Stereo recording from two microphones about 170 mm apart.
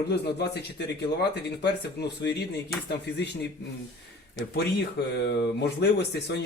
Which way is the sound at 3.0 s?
90° left.